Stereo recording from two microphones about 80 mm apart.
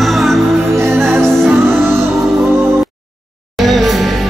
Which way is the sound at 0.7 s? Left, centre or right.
Right.